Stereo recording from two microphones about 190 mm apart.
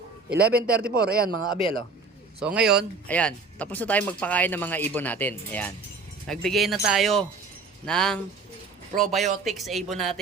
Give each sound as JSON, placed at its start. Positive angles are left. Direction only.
{"t": 0.3, "sound": "a man's voice", "side_deg": -5}
{"t": 0.9, "sound": "speech", "side_deg": -50}
{"t": 2.4, "sound": "speech", "side_deg": -5}
{"t": 3.1, "sound": "speech", "side_deg": 5}